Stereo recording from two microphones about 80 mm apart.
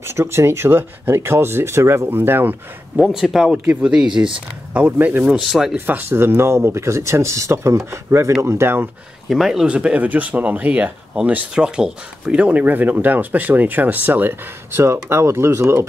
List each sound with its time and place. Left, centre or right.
0.0 s speech: right
3.0 s speech: centre
5.4 s speech: centre
5.8 s speech: right
9.3 s speech: centre
11.5 s speech: centre
15.0 s speech: right